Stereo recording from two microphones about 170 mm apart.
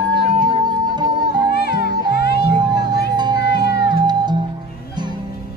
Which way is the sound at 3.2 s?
25° right (ahead or behind).